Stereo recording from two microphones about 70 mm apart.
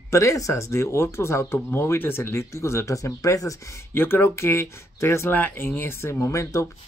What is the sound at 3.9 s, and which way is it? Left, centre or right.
Speech, left.